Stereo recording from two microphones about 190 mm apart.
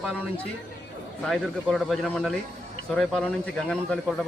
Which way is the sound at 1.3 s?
Centre (ahead or behind).